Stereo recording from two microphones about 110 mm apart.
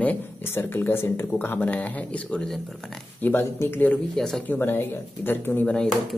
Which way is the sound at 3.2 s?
20° left (ahead or behind).